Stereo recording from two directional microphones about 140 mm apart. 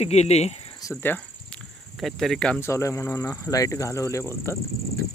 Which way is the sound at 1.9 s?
Centre (ahead or behind).